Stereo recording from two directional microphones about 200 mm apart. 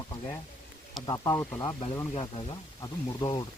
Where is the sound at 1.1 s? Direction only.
15° left (ahead or behind).